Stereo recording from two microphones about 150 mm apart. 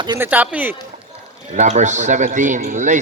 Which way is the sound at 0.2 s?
10° right (ahead or behind).